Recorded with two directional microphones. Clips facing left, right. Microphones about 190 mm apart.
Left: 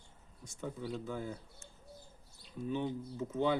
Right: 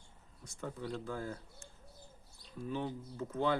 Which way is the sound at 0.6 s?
5° left (ahead or behind).